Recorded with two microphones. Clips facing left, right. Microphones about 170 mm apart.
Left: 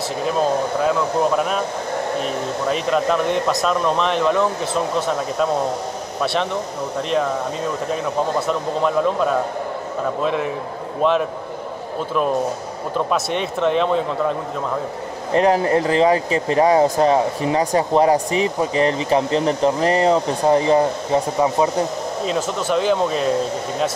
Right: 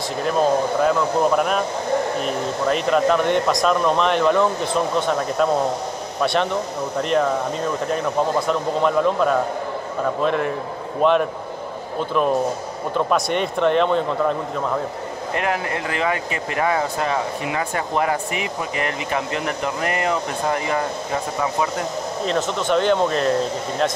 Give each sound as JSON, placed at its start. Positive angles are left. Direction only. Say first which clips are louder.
{"t": 0.8, "sound": "speech", "louder": "left 1 dB", "side_deg": 0}
{"t": 2.7, "sound": "speech", "louder": "right 1 dB", "side_deg": 0}
{"t": 12.9, "sound": "speech", "louder": "right 1 dB", "side_deg": 0}
{"t": 15.3, "sound": "speech", "louder": "left 9 dB", "side_deg": 35}
{"t": 22.2, "sound": "speech", "louder": "right 1 dB", "side_deg": 5}